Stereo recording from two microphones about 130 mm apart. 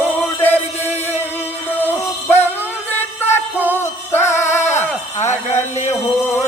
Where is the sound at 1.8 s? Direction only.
15° left (ahead or behind).